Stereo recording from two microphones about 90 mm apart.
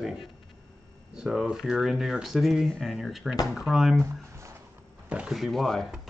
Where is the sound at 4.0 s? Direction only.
30° right (ahead or behind).